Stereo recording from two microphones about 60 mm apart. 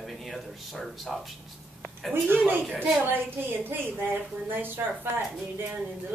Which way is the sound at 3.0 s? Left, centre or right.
Right.